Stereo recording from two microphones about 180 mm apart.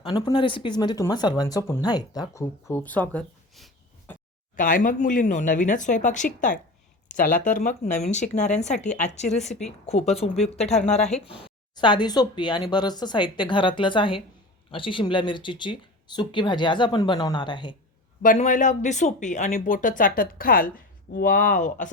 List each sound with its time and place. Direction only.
0.0 s speech: 25° left (ahead or behind); by 4.1 s 5° left (ahead or behind)
4.5 s speech: 50° left (ahead or behind); by 17.7 s 25° left (ahead or behind)
18.2 s speech: 45° left (ahead or behind)